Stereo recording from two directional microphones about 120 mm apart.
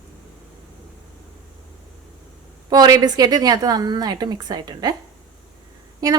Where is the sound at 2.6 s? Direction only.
35° right (ahead or behind).